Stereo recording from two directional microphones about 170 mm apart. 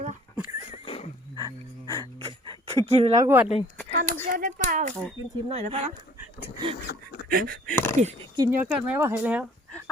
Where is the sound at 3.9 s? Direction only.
55° right (ahead or behind).